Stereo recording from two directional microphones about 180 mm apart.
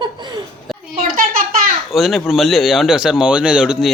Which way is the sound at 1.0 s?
50° right (ahead or behind).